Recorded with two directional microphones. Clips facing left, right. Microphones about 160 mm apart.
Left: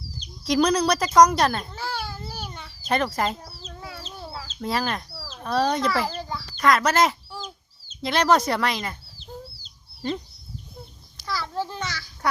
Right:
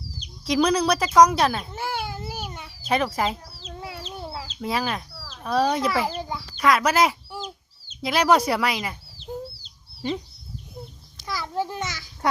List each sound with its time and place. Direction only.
0.4 s a woman's voice: 5° right (ahead or behind)
1.7 s a sound: 20° right (ahead or behind); by 3.3 s 5° right (ahead or behind)
3.7 s chicken: 20° right (ahead or behind)
4.6 s a woman's voice: 5° right (ahead or behind)
6.6 s chicken: 5° right (ahead or behind)
8.0 s speech: 10° right (ahead or behind)
11.3 s babbling: 15° right (ahead or behind)